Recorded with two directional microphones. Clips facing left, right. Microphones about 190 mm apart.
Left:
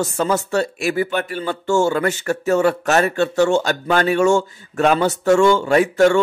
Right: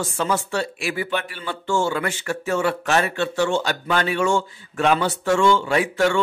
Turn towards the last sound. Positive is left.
turn(degrees=45)  # may be behind; listen again after turning